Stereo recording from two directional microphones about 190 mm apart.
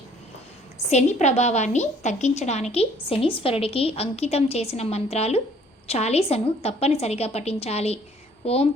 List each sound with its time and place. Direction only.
0.8 s a woman's voice: 35° left (ahead or behind)